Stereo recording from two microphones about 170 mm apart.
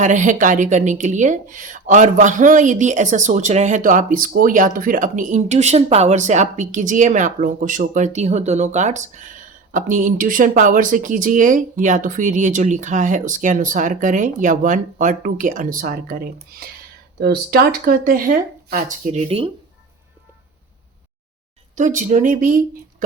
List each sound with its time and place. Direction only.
0.0 s speech: 45° right (ahead or behind)
18.7 s speech: 45° right (ahead or behind)
21.8 s speech: 45° right (ahead or behind)